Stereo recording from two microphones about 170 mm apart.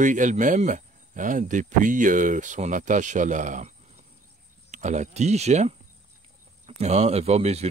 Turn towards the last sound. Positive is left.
turn(degrees=-40)  # may be behind; listen again after turning